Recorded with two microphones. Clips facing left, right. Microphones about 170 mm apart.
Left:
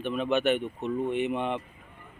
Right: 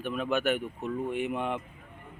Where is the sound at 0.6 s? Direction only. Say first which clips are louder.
Left 3 dB; 20° left (ahead or behind).